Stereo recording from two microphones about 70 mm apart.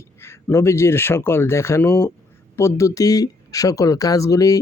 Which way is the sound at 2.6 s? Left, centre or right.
Left.